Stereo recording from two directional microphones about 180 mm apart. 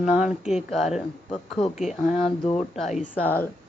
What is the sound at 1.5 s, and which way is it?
Speech, 35° left (ahead or behind).